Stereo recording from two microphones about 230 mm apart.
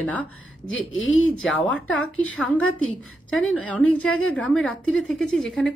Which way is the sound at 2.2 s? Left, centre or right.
Centre.